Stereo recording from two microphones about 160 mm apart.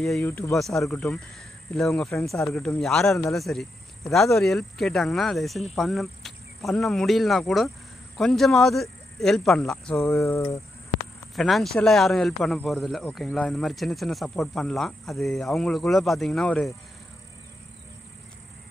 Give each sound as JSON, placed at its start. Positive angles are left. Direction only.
{"t": 0.0, "sound": "speech", "side_deg": 0}
{"t": 0.3, "sound": "speech", "side_deg": 10}
{"t": 10.0, "sound": "a sound", "side_deg": 20}
{"t": 11.3, "sound": "speech", "side_deg": 0}